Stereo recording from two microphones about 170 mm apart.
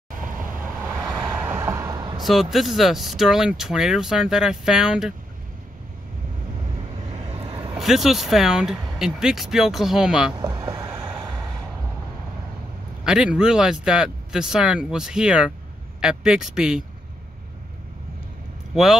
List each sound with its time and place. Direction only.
1.5 s vehicle: 15° right (ahead or behind)
2.1 s speech: centre (ahead or behind)
7.2 s vehicle: 35° right (ahead or behind)
7.7 s speech: centre (ahead or behind)
10.3 s vehicle: 20° right (ahead or behind)
13.0 s speech: 5° right (ahead or behind)